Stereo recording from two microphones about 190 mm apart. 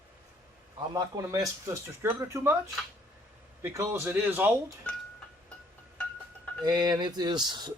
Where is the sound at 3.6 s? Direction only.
15° right (ahead or behind).